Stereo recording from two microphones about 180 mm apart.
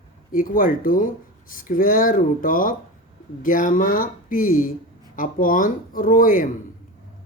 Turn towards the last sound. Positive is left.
turn(degrees=50)  # may be behind; listen again after turning